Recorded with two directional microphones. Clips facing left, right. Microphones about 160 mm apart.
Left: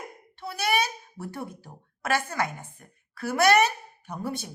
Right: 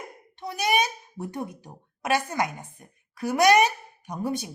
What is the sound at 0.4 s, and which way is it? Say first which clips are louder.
A child's voice: right 2 dB; 15° right (ahead or behind).